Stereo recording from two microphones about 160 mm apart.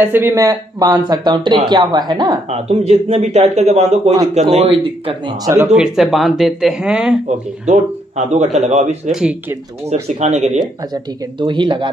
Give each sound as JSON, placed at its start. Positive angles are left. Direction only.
{"t": 0.0, "sound": "speech", "side_deg": -15}
{"t": 2.5, "sound": "speech", "side_deg": -40}
{"t": 5.4, "sound": "speech", "side_deg": -15}
{"t": 5.8, "sound": "speech", "side_deg": -5}
{"t": 7.2, "sound": "speech", "side_deg": -45}
{"t": 9.1, "sound": "speech", "side_deg": -5}
{"t": 10.2, "sound": "speech", "side_deg": -45}
{"t": 11.3, "sound": "speech", "side_deg": -30}